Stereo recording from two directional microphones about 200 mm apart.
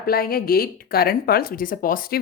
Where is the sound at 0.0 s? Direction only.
50° left (ahead or behind).